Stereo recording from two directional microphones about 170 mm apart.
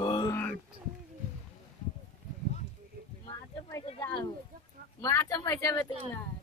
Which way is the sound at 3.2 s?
30° left (ahead or behind).